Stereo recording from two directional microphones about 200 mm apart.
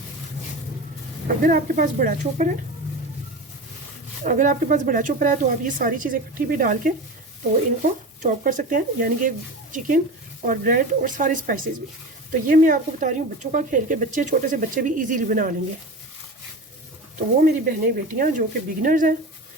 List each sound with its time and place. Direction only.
1.4 s speech: 45° right (ahead or behind)
4.2 s speech: 40° right (ahead or behind)
17.2 s speech: 45° right (ahead or behind)